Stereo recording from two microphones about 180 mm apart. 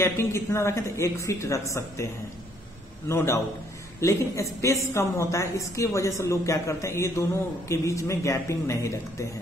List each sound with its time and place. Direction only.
0.0 s a woman's voice: 15° left (ahead or behind)
3.1 s a woman's voice: 15° left (ahead or behind)